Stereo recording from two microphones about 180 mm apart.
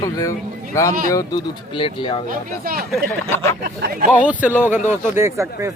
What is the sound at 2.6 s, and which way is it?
Speech, 55° right (ahead or behind).